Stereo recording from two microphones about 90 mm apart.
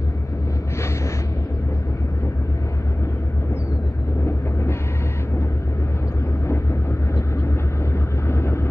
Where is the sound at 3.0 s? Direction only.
35° left (ahead or behind).